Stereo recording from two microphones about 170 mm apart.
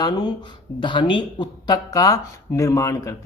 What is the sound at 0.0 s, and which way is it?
Speech, 25° left (ahead or behind).